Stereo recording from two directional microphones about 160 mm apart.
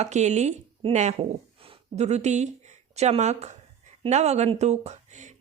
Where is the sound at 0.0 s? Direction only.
45° right (ahead or behind).